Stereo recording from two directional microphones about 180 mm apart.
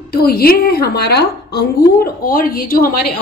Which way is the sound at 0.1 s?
55° left (ahead or behind).